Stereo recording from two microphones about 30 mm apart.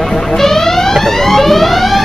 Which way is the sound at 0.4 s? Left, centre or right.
Centre.